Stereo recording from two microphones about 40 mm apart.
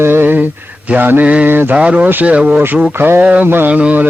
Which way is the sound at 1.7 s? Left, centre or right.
Right.